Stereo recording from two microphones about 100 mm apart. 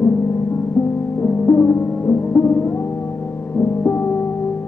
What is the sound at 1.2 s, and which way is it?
Music, 20° left (ahead or behind).